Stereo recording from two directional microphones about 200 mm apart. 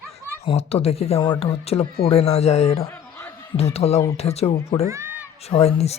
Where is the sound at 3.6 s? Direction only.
30° left (ahead or behind).